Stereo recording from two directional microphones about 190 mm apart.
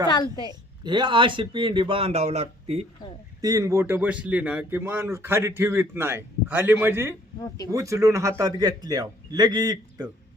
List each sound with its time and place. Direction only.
0.1 s a woman's voice: 20° left (ahead or behind)
0.9 s a man's voice: 25° right (ahead or behind)
3.4 s speech: 15° right (ahead or behind)
7.4 s speech: 20° left (ahead or behind)
7.7 s a man's voice: 15° right (ahead or behind)